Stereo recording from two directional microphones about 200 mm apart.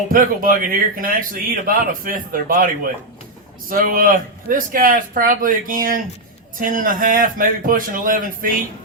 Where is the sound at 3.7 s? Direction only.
45° right (ahead or behind).